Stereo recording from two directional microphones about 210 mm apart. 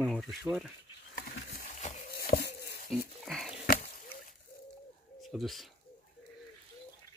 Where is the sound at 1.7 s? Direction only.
35° left (ahead or behind).